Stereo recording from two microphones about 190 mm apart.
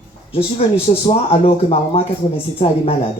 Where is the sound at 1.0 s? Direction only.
30° left (ahead or behind).